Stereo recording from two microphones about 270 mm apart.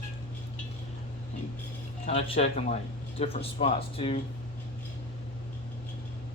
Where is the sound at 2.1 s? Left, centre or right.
Left.